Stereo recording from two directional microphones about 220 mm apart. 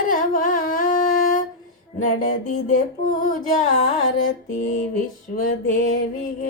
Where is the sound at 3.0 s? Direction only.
35° left (ahead or behind).